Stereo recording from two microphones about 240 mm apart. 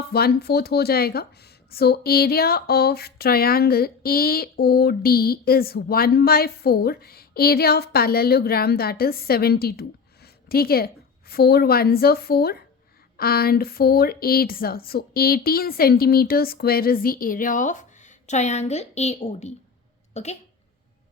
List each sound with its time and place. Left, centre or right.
0.1 s a woman's voice: left